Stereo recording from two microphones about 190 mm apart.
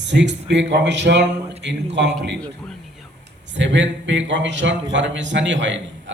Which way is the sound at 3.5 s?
70° right (ahead or behind).